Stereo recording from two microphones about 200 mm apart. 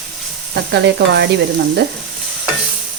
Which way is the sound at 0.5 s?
55° right (ahead or behind).